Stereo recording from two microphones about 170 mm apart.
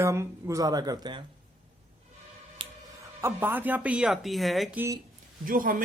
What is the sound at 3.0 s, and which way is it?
Speech, 15° right (ahead or behind).